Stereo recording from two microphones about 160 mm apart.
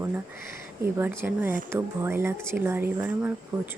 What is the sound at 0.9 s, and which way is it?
Speech, 15° right (ahead or behind).